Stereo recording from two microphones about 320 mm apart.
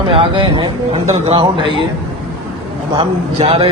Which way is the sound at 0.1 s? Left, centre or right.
Centre.